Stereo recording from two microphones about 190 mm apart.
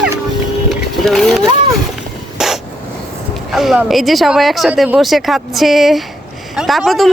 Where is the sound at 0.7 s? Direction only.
Centre (ahead or behind).